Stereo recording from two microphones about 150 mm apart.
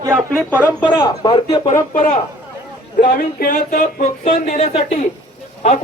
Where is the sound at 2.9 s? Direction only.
80° left.